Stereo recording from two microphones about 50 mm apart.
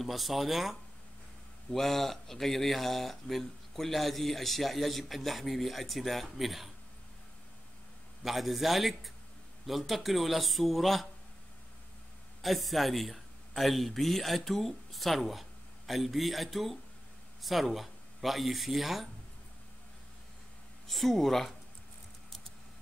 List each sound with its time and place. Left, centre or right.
0.0 s speech: centre
8.2 s speech: centre
12.4 s speech: centre
20.8 s speech: centre